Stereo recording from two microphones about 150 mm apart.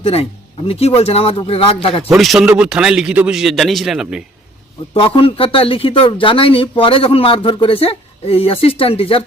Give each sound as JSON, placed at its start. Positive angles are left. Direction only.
{"t": 0.0, "sound": "a man's voice", "side_deg": 40}
{"t": 2.0, "sound": "a man's voice", "side_deg": 0}
{"t": 4.9, "sound": "a man's voice", "side_deg": 35}